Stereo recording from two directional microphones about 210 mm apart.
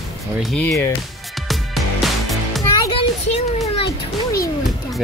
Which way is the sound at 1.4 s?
Centre (ahead or behind).